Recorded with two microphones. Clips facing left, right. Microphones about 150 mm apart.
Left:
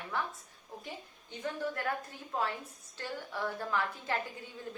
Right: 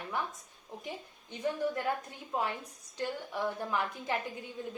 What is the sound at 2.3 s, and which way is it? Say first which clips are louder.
A woman's voice: right 1 dB; 15° right (ahead or behind).